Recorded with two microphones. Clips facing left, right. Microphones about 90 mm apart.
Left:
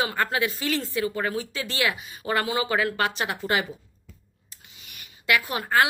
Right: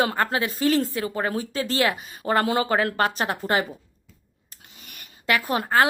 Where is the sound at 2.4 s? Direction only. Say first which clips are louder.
Right 3 dB; 55° right (ahead or behind).